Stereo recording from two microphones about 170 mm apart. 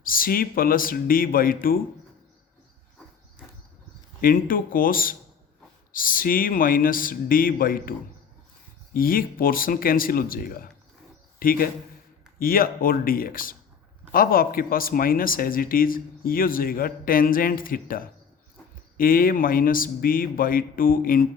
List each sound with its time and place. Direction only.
0.0 s speech: 55° left (ahead or behind)
4.2 s a man's voice: 55° left (ahead or behind)